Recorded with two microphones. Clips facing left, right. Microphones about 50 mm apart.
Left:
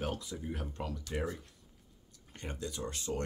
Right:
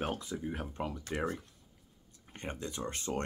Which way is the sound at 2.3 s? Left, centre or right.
Right.